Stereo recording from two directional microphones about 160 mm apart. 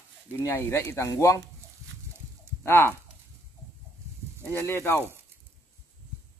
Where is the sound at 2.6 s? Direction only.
15° left (ahead or behind).